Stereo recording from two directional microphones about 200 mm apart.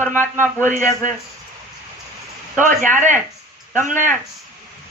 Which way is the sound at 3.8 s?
40° right (ahead or behind).